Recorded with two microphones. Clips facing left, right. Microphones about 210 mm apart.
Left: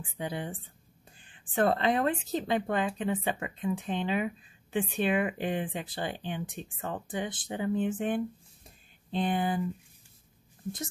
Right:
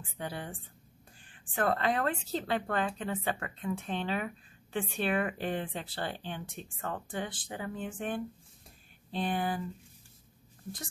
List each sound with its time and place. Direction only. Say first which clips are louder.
0.2 s a woman's voice: left 4 dB; 20° left (ahead or behind)